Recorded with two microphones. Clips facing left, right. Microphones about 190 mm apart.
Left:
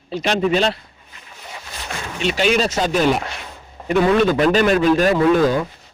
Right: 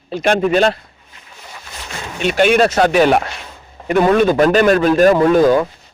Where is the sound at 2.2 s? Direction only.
55° right (ahead or behind).